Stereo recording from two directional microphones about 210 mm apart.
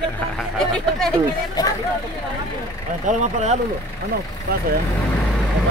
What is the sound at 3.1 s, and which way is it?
Speech, 35° right (ahead or behind).